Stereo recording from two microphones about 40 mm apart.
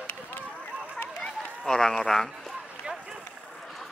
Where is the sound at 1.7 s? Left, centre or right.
Centre.